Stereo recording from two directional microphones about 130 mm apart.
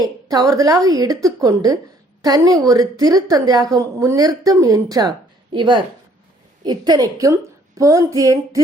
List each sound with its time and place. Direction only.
0.0 s a woman's voice: 30° right (ahead or behind)